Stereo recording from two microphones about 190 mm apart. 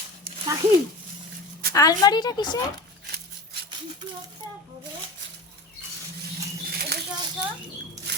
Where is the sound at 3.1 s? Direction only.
55° right (ahead or behind).